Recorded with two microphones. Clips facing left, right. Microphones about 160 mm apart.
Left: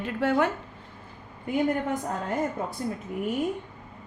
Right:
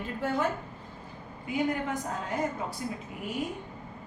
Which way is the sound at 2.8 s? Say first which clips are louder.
Left 5 dB; 45° left (ahead or behind).